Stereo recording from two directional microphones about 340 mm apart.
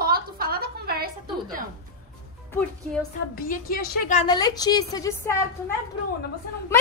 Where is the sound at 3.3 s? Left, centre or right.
Left; by 5.3 s centre.